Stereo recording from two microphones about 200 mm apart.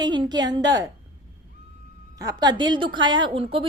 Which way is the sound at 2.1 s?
20° right (ahead or behind).